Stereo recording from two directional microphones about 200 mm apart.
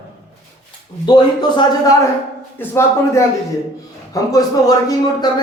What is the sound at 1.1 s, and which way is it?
A man's voice, 20° left (ahead or behind).